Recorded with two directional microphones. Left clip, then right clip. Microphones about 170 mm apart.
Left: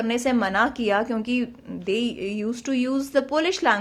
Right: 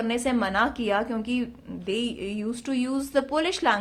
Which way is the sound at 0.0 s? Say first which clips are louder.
Left 3 dB; 20° left (ahead or behind).